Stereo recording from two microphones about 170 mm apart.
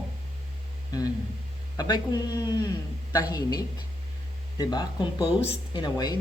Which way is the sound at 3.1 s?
20° left (ahead or behind).